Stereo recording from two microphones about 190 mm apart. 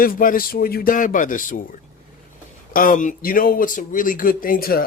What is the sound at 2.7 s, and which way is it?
Speech, 45° left (ahead or behind).